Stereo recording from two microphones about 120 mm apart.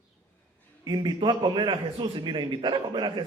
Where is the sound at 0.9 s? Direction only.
40° right (ahead or behind).